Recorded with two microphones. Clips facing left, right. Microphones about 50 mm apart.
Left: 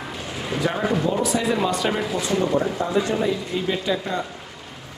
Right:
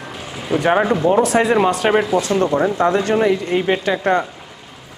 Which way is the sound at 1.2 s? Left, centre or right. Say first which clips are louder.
Right 7 dB; right.